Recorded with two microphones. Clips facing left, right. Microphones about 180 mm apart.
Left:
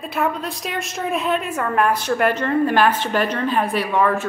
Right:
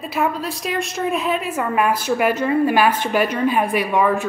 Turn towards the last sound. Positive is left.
turn(degrees=-10)  # may be behind; listen again after turning